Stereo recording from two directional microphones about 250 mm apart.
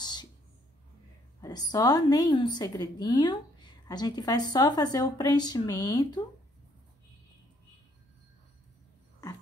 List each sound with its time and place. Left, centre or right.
0.0 s whispering: centre
1.4 s a woman's voice: centre